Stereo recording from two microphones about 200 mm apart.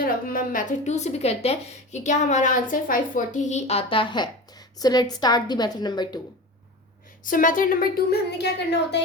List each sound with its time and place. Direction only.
0.0 s a woman's voice: 45° left (ahead or behind); by 6.1 s 20° left (ahead or behind)
7.3 s a woman's voice: 45° left (ahead or behind)